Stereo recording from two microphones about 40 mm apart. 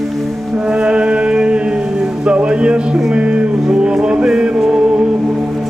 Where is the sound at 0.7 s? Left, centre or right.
Right.